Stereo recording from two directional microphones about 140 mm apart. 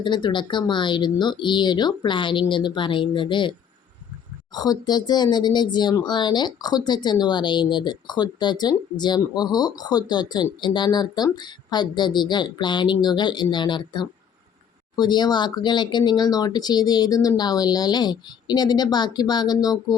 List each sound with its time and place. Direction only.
0.0 s speech: 35° left (ahead or behind)
4.5 s speech: 30° left (ahead or behind)